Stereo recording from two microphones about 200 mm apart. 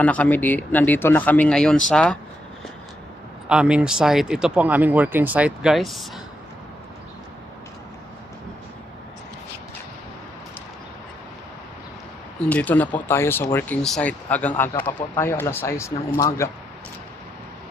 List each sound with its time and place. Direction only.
0.0 s speech: 5° left (ahead or behind)
3.5 s speech: 5° right (ahead or behind)
12.4 s speech: 5° left (ahead or behind)